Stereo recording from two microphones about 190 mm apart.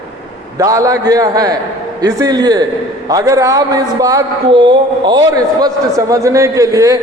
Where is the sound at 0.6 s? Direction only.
15° right (ahead or behind).